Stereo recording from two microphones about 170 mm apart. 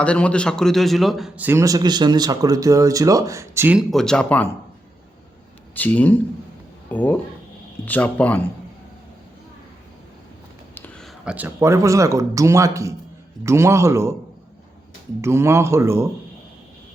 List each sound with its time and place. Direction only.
0.0 s a man's voice: 5° left (ahead or behind)
1.5 s speech: 15° right (ahead or behind)
3.8 s a man's voice: 5° left (ahead or behind)
5.7 s speech: 10° left (ahead or behind)
10.8 s a sound: 5° left (ahead or behind)
11.3 s speech: 15° right (ahead or behind)
15.2 s speech: 15° right (ahead or behind)